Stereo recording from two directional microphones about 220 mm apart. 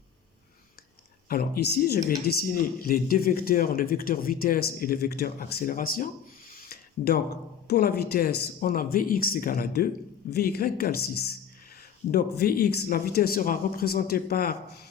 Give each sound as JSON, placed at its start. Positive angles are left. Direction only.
{"t": 1.3, "sound": "speech", "side_deg": 45}
{"t": 6.5, "sound": "a sound", "side_deg": 40}
{"t": 7.7, "sound": "speech", "side_deg": 45}